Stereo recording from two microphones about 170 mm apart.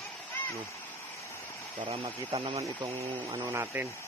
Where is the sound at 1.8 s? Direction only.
35° right (ahead or behind).